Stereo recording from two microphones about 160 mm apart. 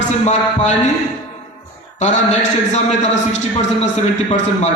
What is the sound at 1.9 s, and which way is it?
A man's voice, 45° left (ahead or behind).